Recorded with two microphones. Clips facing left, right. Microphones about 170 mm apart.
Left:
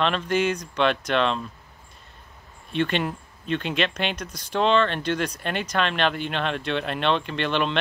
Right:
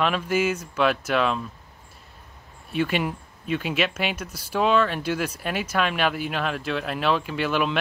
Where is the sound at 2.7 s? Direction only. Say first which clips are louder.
Even; 5° right (ahead or behind).